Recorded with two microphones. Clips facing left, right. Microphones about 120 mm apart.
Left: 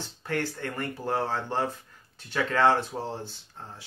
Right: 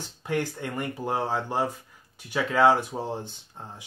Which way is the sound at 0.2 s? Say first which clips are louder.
Right 2 dB; 15° right (ahead or behind).